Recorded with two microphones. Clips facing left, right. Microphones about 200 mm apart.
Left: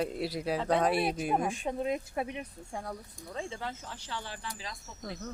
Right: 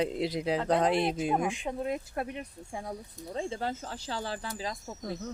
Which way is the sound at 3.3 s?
35° right (ahead or behind).